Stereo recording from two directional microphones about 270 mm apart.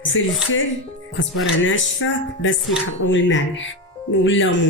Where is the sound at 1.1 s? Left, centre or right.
Left.